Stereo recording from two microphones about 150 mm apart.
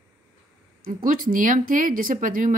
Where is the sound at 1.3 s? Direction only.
65° right (ahead or behind).